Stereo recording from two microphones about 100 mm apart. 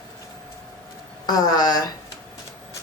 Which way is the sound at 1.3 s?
40° left (ahead or behind).